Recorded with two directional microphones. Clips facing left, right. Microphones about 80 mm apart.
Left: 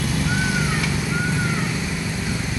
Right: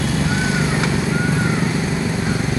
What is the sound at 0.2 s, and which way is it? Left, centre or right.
Vehicle, right.